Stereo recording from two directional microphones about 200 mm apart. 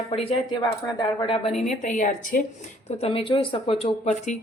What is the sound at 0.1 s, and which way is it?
Speech, 25° left (ahead or behind).